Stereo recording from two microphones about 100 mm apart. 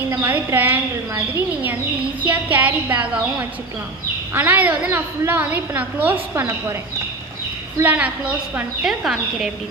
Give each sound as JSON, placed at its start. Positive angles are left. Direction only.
{"t": 0.1, "sound": "a woman's voice", "side_deg": -20}
{"t": 7.8, "sound": "a woman's voice", "side_deg": -15}
{"t": 8.8, "sound": "speech", "side_deg": -5}